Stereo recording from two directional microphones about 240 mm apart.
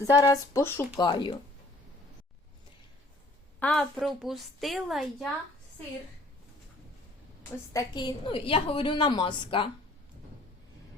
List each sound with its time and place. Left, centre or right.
0.1 s a woman's voice: centre
3.6 s a woman's voice: centre
7.7 s a woman's voice: centre